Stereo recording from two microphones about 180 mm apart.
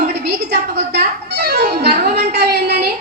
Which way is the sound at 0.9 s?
60° right (ahead or behind).